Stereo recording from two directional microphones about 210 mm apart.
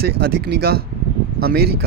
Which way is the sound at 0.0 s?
50° right (ahead or behind).